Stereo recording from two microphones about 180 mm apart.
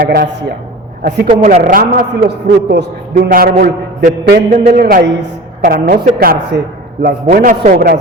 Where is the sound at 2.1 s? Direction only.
65° right (ahead or behind).